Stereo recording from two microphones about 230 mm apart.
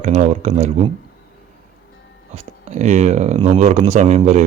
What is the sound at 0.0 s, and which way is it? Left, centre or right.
Speech, right.